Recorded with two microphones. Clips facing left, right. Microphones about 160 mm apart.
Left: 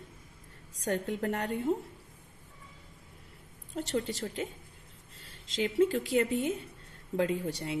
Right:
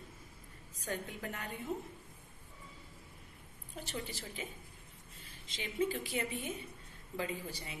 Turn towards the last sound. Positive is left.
turn(degrees=70)  # may be behind; listen again after turning